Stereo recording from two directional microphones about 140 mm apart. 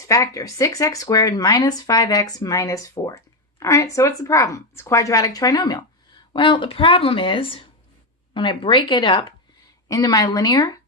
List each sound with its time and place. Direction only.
0.1 s speech: 20° left (ahead or behind)